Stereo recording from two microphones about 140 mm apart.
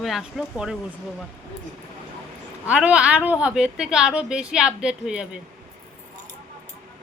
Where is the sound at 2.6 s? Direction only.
10° right (ahead or behind).